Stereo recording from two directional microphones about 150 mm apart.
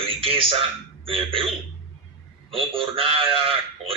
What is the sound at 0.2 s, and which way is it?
A man's voice, 40° right (ahead or behind).